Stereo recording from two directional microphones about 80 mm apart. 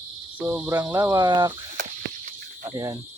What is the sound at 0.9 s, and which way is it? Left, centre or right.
Speech, right.